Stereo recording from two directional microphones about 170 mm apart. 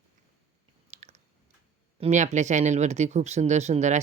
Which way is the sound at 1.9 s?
40° right (ahead or behind).